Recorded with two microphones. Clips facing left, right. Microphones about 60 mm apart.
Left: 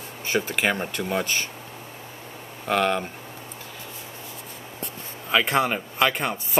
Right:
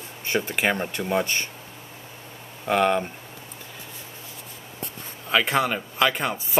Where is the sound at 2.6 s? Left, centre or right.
Centre.